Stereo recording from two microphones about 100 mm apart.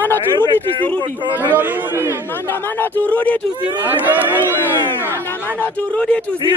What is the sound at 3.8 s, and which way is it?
Speech, 20° right (ahead or behind).